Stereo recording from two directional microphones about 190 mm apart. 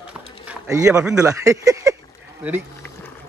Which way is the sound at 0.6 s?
15° right (ahead or behind).